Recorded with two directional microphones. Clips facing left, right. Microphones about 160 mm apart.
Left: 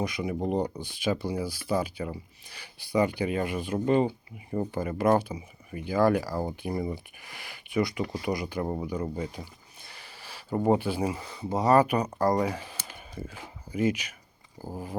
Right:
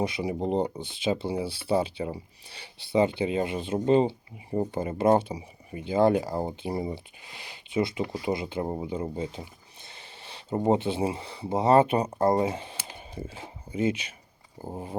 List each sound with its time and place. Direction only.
0.0 s speech: 30° right (ahead or behind)